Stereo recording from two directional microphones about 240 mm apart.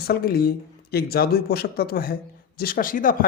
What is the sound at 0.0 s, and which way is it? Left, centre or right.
Speech, left.